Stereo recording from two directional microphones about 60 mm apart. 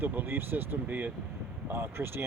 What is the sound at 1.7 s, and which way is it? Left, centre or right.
Speech, right.